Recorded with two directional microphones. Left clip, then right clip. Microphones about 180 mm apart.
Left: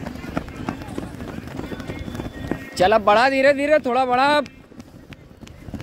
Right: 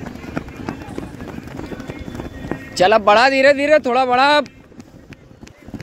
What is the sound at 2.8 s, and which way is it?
Speech, 10° right (ahead or behind).